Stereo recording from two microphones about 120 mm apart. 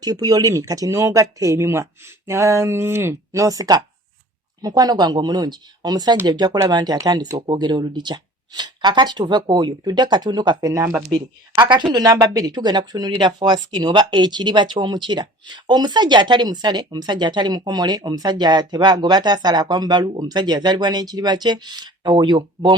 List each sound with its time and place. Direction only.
0.0 s speech: 35° right (ahead or behind)